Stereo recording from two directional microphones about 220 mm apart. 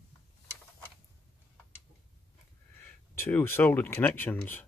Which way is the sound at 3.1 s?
10° left (ahead or behind).